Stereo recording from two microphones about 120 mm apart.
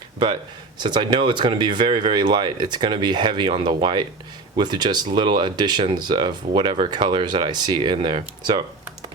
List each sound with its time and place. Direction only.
0.8 s speech: 40° right (ahead or behind)